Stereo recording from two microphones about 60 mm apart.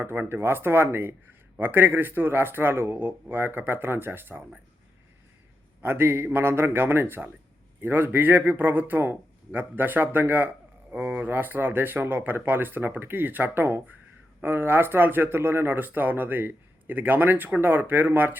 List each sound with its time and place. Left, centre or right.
0.0 s speech: right
5.8 s speech: right